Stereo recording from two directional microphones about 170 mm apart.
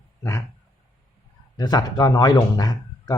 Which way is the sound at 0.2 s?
20° left (ahead or behind).